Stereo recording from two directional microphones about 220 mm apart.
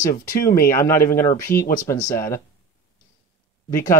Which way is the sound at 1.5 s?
40° left (ahead or behind).